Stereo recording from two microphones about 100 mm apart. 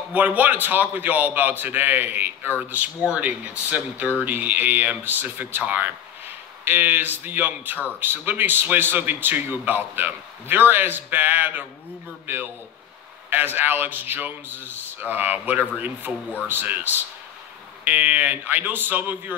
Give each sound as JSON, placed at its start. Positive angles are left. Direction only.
{"t": 0.1, "sound": "a man's voice", "side_deg": -15}